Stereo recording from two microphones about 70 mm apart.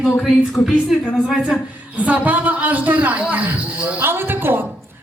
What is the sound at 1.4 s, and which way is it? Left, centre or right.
A woman's voice, centre.